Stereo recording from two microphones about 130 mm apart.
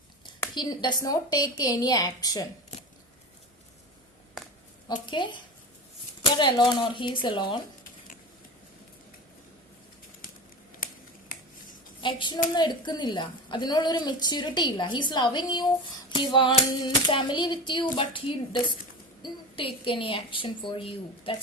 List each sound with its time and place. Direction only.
0.5 s a woman's voice: 35° left (ahead or behind)
2.7 s a sound: 65° left (ahead or behind)
4.4 s a sound: centre (ahead or behind)
5.0 s a woman's voice: 40° left (ahead or behind)
10.8 s finger snapping: 90° left
11.9 s a woman's voice: 40° left (ahead or behind)